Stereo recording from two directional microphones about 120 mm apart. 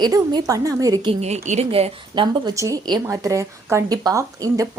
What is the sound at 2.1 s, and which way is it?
Speech, 40° right (ahead or behind).